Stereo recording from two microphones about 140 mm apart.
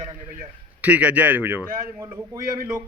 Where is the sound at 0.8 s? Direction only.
10° right (ahead or behind).